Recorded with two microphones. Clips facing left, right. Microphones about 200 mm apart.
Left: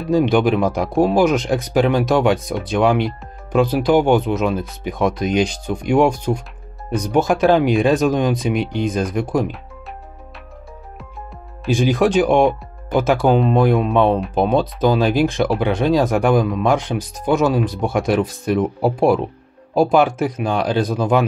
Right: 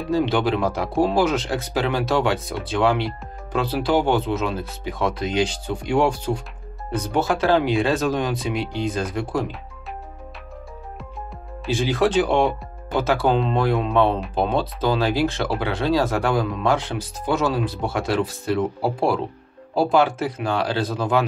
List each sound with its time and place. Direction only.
0.1 s speech: 15° left (ahead or behind)
11.6 s speech: 15° left (ahead or behind)